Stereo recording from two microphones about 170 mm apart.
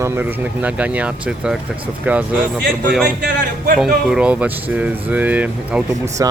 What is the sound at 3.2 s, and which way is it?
Speech, 55° right (ahead or behind).